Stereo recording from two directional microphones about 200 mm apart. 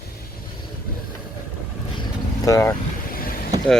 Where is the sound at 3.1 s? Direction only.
45° left (ahead or behind).